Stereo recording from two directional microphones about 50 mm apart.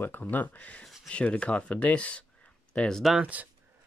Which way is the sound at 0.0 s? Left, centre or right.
Left.